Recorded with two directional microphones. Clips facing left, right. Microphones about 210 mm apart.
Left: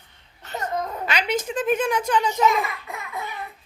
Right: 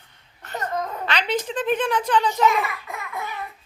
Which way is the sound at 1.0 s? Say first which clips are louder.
Even; 10° left (ahead or behind).